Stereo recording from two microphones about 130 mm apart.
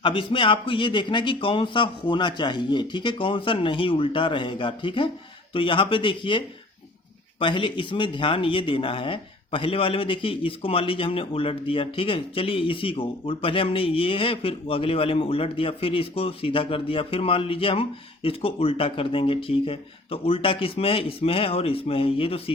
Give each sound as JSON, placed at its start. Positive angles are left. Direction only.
{"t": 0.0, "sound": "a man's voice", "side_deg": 40}